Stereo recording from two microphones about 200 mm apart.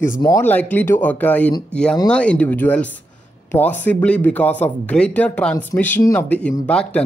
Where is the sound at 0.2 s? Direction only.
15° left (ahead or behind).